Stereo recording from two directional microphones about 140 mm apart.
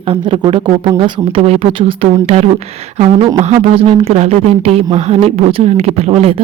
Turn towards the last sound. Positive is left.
turn(degrees=-45)  # may be behind; listen again after turning